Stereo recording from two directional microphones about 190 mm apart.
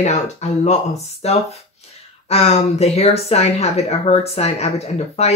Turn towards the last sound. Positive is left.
turn(degrees=35)  # may be behind; listen again after turning